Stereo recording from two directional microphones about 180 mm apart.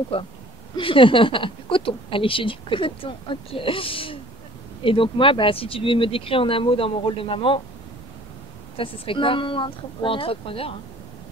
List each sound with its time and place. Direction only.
0.1 s speech: 30° left (ahead or behind)
8.7 s speech: 30° left (ahead or behind)